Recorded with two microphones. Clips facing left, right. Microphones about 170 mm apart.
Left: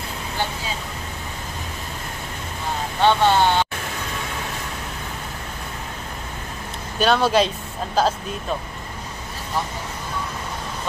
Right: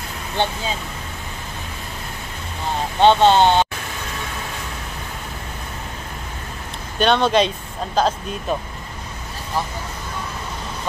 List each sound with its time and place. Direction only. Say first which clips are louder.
0.4 s speech: right 5 dB; 25° right (ahead or behind)
3.0 s speech: right 4 dB; 20° right (ahead or behind)
7.0 s speech: right 1 dB; 5° left (ahead or behind)